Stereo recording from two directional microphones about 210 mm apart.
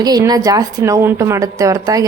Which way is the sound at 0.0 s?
20° right (ahead or behind).